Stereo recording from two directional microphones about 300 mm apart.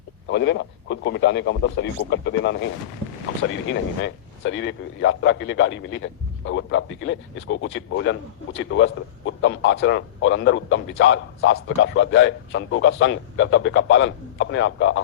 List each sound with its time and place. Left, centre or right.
0.3 s speech: left
3.7 s speech: left